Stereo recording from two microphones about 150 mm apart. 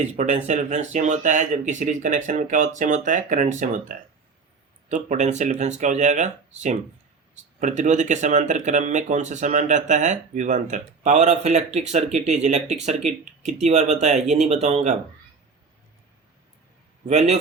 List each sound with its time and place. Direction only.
0.0 s speech: 50° right (ahead or behind)
17.1 s speech: 45° right (ahead or behind)